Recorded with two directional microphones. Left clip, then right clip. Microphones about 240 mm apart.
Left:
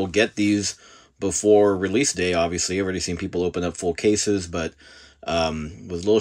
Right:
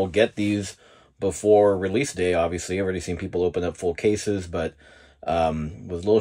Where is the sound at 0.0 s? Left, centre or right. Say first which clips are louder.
Even; centre.